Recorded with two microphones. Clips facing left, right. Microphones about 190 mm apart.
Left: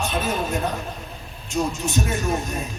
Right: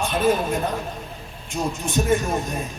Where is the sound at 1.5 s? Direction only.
55° right (ahead or behind).